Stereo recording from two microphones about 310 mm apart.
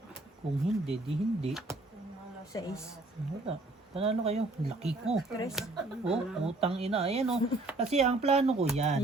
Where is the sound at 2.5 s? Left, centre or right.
Centre.